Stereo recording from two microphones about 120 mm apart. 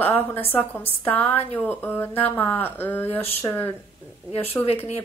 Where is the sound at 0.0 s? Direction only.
15° left (ahead or behind).